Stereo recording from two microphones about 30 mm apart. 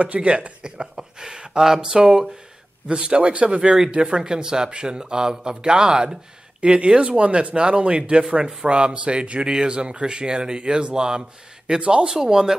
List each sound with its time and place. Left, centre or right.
0.0 s speech: right
0.6 s speech: right
2.0 s speech: right
8.9 s speech: right